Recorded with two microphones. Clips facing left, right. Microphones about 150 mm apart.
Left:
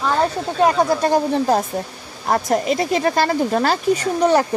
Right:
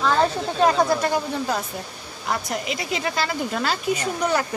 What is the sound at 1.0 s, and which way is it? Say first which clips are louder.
Speech: left 6 dB; 35° left (ahead or behind).